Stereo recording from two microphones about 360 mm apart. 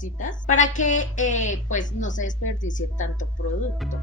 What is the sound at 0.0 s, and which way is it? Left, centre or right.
A woman's voice, left.